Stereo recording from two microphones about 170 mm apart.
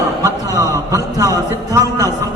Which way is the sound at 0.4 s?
20° right (ahead or behind).